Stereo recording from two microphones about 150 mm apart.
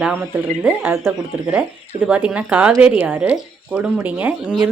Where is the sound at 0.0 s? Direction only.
10° right (ahead or behind).